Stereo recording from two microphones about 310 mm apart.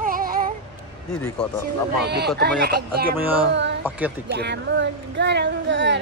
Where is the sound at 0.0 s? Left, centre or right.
Right.